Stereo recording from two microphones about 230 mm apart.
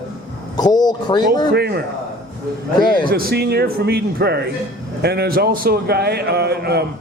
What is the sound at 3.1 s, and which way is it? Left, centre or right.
A man's voice, right.